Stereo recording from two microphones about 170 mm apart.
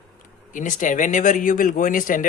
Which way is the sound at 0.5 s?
50° left (ahead or behind).